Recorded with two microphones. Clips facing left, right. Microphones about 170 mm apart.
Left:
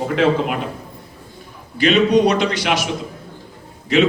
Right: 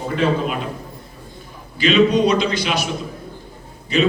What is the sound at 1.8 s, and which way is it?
A man's voice, 70° left (ahead or behind).